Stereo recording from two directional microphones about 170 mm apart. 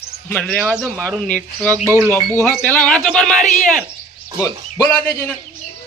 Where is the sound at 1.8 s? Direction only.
15° right (ahead or behind).